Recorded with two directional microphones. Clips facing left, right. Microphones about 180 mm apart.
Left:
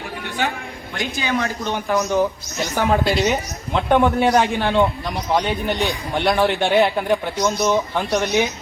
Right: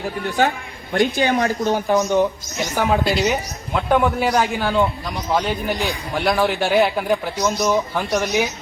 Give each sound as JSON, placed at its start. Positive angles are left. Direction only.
{"t": 0.3, "sound": "a man's voice", "side_deg": -40}
{"t": 0.9, "sound": "speech", "side_deg": -50}
{"t": 2.6, "sound": "speech", "side_deg": -10}
{"t": 3.0, "sound": "a man's voice", "side_deg": 0}